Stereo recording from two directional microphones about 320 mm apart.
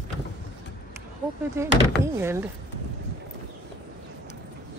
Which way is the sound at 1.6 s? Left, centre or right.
Centre.